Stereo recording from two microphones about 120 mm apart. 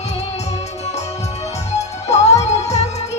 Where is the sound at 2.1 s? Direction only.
65° left (ahead or behind).